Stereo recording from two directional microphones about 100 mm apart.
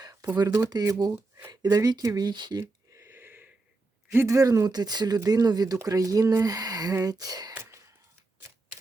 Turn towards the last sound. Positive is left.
turn(degrees=-30)  # may be behind; listen again after turning